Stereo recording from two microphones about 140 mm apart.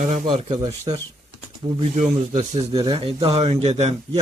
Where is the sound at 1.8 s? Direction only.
60° right (ahead or behind).